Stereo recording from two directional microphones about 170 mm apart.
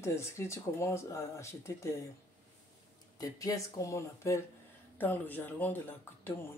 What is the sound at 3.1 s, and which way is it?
Speech, 20° left (ahead or behind).